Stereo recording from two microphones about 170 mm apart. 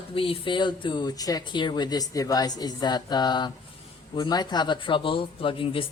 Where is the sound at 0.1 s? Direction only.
30° left (ahead or behind).